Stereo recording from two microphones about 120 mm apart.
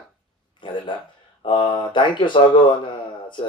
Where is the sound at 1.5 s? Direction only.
40° left (ahead or behind).